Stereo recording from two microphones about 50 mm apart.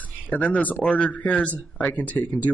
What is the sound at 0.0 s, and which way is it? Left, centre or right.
Speech, left.